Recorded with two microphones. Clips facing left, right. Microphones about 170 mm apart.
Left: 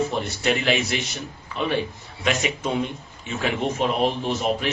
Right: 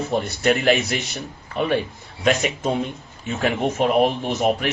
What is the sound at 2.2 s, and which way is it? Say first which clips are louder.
Speech: right 4 dB; 45° right (ahead or behind).